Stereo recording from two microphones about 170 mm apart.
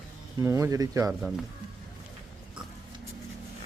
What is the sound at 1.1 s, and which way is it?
Speech, centre (ahead or behind).